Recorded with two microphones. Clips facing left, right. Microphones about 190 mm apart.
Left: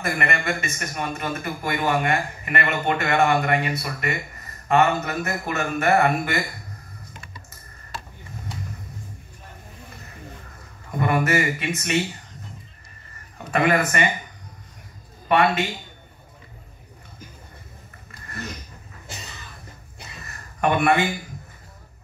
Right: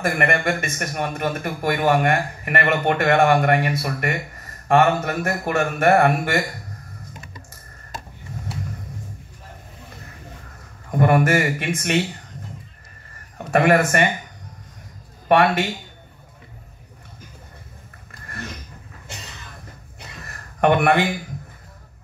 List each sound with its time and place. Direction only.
0.0 s a man's voice: 50° right (ahead or behind)
11.0 s speech: 50° right (ahead or behind)
13.4 s a man's voice: 50° right (ahead or behind)
20.6 s speech: 60° right (ahead or behind)